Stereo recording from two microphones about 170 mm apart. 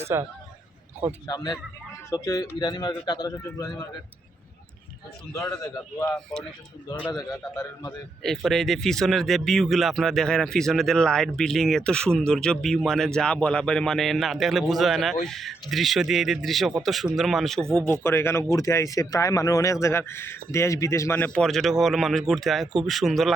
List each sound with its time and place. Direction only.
0.1 s a man's voice: 15° right (ahead or behind)
1.3 s speech: 20° left (ahead or behind)
5.3 s speech: 15° left (ahead or behind)
7.5 s speech: 20° left (ahead or behind)
8.2 s speech: centre (ahead or behind)
17.7 s speech: 15° left (ahead or behind)